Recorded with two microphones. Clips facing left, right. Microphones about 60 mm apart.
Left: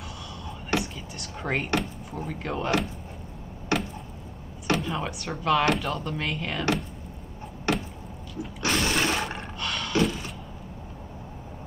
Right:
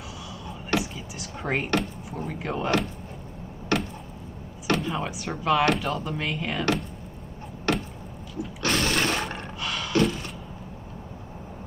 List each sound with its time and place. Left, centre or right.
0.7 s vehicle: centre
1.8 s speech: centre
4.6 s speech: centre
7.7 s a sound: left
8.4 s roar: centre